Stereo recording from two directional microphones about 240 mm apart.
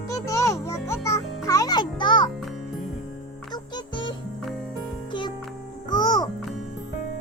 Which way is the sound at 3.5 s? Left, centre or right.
Centre.